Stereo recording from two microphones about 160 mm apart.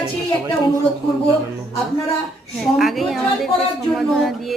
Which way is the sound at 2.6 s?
Centre (ahead or behind).